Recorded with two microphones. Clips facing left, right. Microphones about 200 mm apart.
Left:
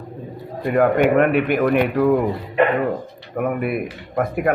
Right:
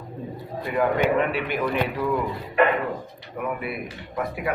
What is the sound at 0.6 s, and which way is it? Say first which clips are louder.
Speech: left 6 dB; 55° left (ahead or behind).